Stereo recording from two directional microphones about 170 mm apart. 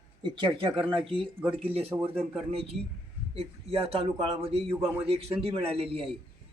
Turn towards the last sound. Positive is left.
turn(degrees=-35)  # may be behind; listen again after turning